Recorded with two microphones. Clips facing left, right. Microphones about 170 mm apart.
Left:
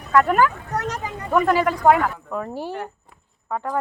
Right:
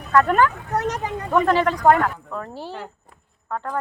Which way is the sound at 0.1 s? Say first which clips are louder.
Even; 10° left (ahead or behind).